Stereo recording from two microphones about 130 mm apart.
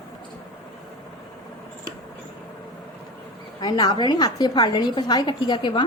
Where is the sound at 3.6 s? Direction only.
30° left (ahead or behind).